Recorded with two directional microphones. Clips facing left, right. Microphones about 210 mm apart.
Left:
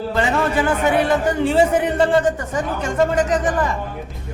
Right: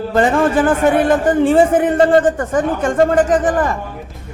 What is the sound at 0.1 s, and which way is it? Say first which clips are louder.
A man's voice: right 6 dB; 50° right (ahead or behind).